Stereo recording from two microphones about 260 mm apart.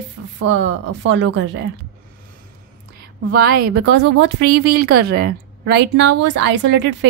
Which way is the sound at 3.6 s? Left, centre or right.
Right.